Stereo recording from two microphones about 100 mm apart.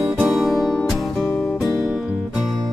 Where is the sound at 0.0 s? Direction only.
5° right (ahead or behind).